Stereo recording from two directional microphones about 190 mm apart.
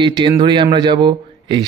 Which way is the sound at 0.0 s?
25° right (ahead or behind).